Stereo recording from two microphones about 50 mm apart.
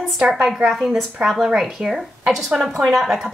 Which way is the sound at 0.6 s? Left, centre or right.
Centre.